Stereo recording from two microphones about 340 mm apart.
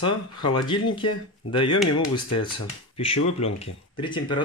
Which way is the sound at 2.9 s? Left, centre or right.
Centre.